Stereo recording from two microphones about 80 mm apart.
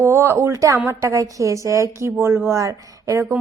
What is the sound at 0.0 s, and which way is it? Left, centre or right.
A woman's voice, right.